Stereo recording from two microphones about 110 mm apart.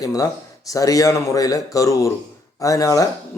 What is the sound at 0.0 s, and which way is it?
A man's voice, 35° left (ahead or behind).